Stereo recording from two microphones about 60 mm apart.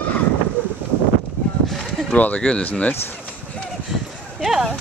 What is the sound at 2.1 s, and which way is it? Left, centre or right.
Speech, left.